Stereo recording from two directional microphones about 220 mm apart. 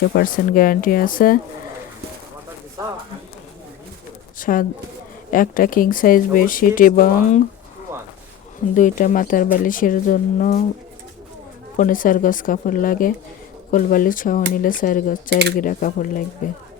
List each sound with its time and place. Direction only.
0.1 s speech: 40° left (ahead or behind)
4.4 s speech: 40° left (ahead or behind)
8.7 s speech: 35° left (ahead or behind)
11.8 s speech: 40° left (ahead or behind)